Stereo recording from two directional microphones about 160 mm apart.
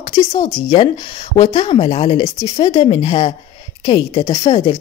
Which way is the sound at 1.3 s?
35° left (ahead or behind).